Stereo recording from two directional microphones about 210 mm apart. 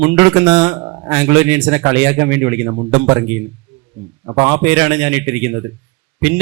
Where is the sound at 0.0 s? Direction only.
10° right (ahead or behind).